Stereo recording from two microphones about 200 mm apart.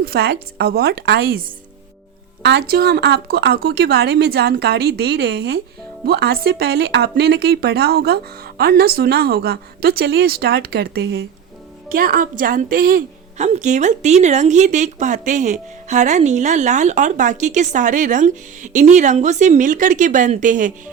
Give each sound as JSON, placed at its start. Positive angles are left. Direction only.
{"t": 0.0, "sound": "a woman's voice", "side_deg": -50}